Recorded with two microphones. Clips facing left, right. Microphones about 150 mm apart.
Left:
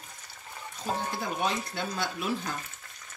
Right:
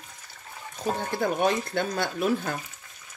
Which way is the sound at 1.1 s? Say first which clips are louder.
Right 6 dB; 55° right (ahead or behind).